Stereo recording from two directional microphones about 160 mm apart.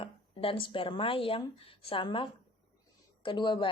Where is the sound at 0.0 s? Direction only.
35° left (ahead or behind).